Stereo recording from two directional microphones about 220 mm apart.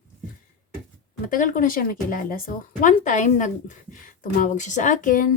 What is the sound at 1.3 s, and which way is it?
Speech, 35° left (ahead or behind).